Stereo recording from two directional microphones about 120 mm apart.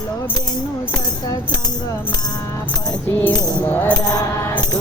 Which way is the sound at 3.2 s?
15° left (ahead or behind).